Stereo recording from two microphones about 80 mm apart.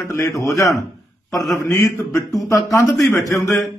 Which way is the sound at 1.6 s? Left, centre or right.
Left.